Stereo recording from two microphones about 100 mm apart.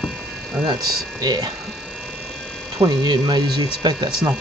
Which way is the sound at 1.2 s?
45° right (ahead or behind).